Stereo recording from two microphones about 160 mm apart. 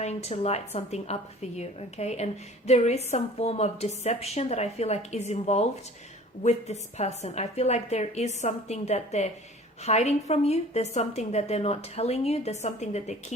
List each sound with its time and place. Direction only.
0.0 s a woman's voice: 45° left (ahead or behind)